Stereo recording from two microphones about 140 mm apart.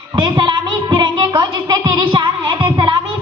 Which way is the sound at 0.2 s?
35° right (ahead or behind).